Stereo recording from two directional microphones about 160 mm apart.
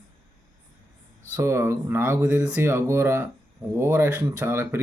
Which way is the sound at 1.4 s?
15° right (ahead or behind).